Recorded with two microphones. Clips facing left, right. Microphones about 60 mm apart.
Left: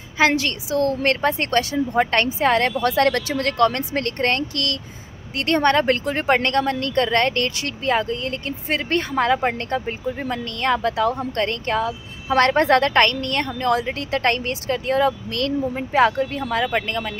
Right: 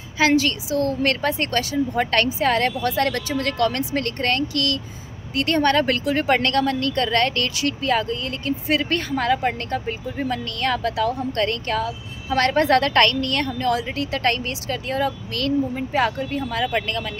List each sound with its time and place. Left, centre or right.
0.3 s speech: left
2.0 s speech: left
13.6 s speech: left
16.7 s speech: left